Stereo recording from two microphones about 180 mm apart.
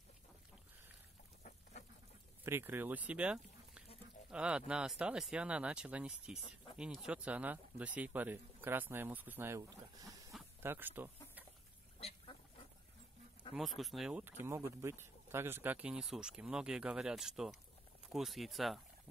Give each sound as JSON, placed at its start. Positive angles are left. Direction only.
{"t": 1.4, "sound": "chicken", "side_deg": 40}
{"t": 2.4, "sound": "speech", "side_deg": -10}
{"t": 13.6, "sound": "speech", "side_deg": 0}